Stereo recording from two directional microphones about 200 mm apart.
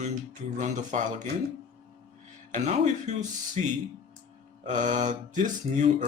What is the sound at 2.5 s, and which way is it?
Mantra, 35° right (ahead or behind).